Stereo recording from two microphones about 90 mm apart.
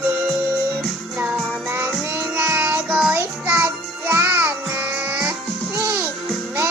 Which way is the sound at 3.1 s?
30° right (ahead or behind).